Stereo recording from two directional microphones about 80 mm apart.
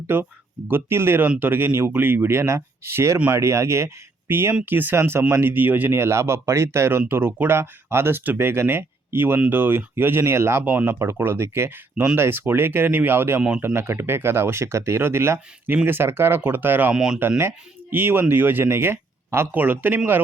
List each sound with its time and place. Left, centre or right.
0.1 s speech: right
16.9 s speech: centre
17.2 s speech: right